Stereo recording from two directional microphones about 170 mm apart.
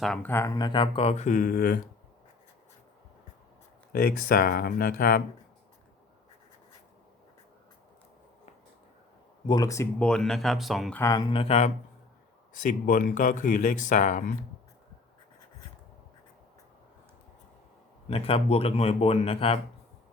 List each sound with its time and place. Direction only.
0.0 s speech: 5° left (ahead or behind); by 1.8 s 55° left (ahead or behind)
3.9 s speech: 60° left (ahead or behind)
9.5 s speech: 20° left (ahead or behind)
10.0 s speech: 5° left (ahead or behind)
10.9 s speech: 20° left (ahead or behind); by 11.7 s 35° left (ahead or behind)
12.5 s speech: 50° left (ahead or behind)
18.1 s speech: 35° left (ahead or behind)